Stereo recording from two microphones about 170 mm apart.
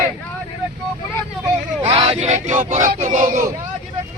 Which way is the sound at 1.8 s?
30° right (ahead or behind).